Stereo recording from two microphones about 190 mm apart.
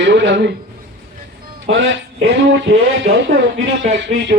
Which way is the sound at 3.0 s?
60° right (ahead or behind).